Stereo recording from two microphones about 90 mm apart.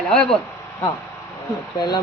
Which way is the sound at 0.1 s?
5° left (ahead or behind).